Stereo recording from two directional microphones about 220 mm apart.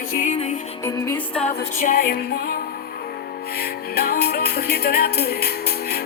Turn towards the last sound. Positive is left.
turn(degrees=45)  # may be behind; listen again after turning